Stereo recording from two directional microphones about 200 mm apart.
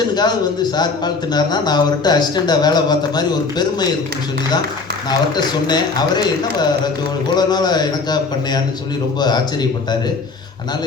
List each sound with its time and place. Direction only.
0.1 s a man's voice: 20° left (ahead or behind)
5.6 s a man's voice: 20° left (ahead or behind)
7.3 s a man's voice: 20° left (ahead or behind)